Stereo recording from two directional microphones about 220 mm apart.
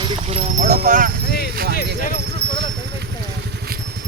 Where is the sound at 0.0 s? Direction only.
25° right (ahead or behind).